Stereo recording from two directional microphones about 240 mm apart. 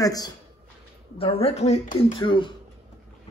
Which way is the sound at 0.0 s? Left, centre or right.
Centre.